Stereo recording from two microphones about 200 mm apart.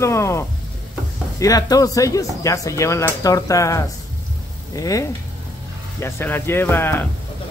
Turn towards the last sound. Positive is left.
turn(degrees=10)  # may be behind; listen again after turning